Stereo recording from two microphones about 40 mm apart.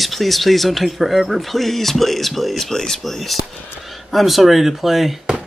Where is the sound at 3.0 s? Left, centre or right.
Centre.